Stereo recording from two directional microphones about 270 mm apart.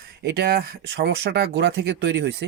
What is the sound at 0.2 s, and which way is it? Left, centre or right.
Speech, right.